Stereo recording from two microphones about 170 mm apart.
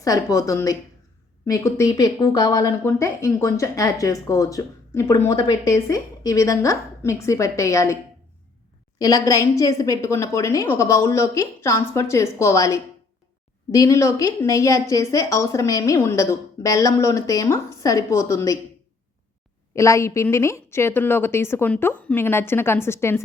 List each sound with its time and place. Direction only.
0.0 s speech: 20° left (ahead or behind)
9.0 s a woman's voice: 20° left (ahead or behind)
19.7 s a woman's voice: 15° left (ahead or behind)